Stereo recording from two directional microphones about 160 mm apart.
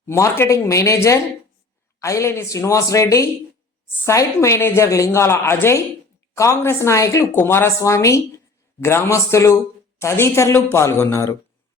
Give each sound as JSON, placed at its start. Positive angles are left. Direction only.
{"t": 0.0, "sound": "a woman's voice", "side_deg": 15}